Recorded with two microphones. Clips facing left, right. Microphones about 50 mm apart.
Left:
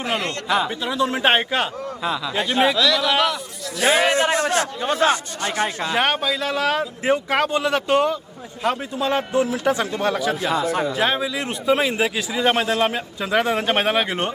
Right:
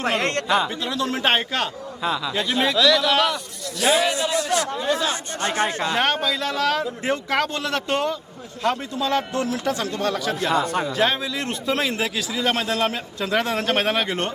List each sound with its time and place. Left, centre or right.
0.2 s speech: right
0.4 s a man's voice: centre
0.9 s a man's voice: centre
2.7 s a man's voice: centre
3.8 s a man's voice: left
5.6 s a man's voice: centre; by 12.9 s left
12.9 s a man's voice: centre